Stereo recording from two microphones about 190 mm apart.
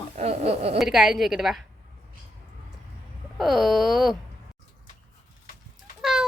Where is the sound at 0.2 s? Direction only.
30° right (ahead or behind).